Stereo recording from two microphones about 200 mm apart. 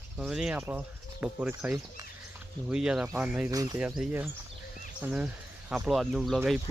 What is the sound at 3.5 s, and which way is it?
Speech, 15° right (ahead or behind).